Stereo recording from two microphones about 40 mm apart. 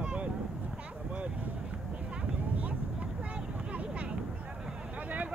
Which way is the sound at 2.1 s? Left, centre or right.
Right.